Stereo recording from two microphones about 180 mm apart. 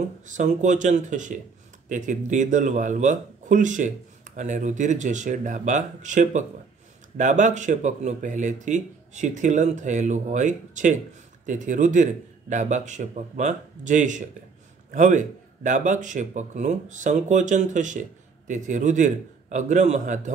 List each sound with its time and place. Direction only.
0.3 s speech: 45° right (ahead or behind)